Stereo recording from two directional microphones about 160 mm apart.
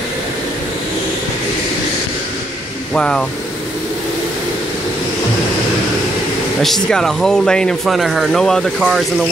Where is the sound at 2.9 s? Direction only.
5° left (ahead or behind).